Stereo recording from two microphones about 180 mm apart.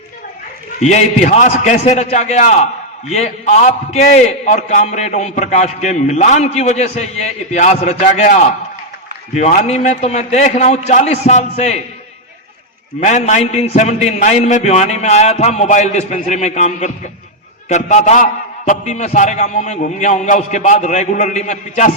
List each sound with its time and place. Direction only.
0.8 s a man's voice: 40° left (ahead or behind)
13.1 s a man's voice: 40° left (ahead or behind)